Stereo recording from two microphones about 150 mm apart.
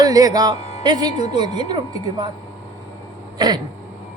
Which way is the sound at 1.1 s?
45° left (ahead or behind).